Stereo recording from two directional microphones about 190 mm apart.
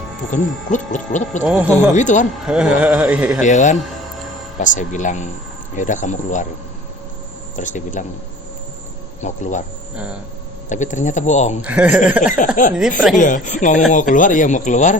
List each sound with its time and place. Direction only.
0.3 s speech: 40° left (ahead or behind)
2.5 s speech: 5° right (ahead or behind)
3.4 s speech: 40° left (ahead or behind)
7.5 s speech: 40° left (ahead or behind)
9.2 s speech: 40° left (ahead or behind)
10.7 s speech: 40° left (ahead or behind)
11.6 s speech: 5° right (ahead or behind)
12.6 s speech: 40° left (ahead or behind)